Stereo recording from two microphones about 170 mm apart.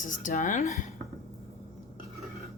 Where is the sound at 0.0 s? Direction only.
50° left (ahead or behind).